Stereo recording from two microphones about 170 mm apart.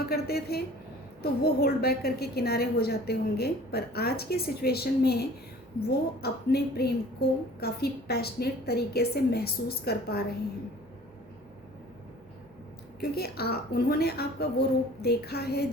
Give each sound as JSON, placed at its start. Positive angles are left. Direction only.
{"t": 0.1, "sound": "a woman's voice", "side_deg": 65}
{"t": 13.0, "sound": "a woman's voice", "side_deg": 65}